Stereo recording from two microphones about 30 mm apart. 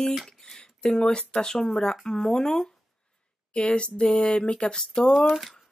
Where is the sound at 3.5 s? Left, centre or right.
Left.